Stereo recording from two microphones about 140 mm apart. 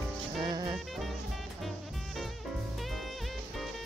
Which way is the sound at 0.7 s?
Centre (ahead or behind).